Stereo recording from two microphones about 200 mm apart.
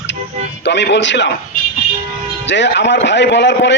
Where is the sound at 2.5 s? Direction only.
60° left (ahead or behind).